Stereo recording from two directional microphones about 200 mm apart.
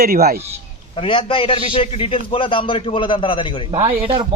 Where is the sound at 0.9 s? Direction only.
25° left (ahead or behind).